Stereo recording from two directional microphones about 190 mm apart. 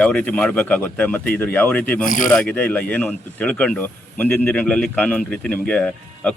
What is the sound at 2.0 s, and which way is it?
Speech, 45° left (ahead or behind).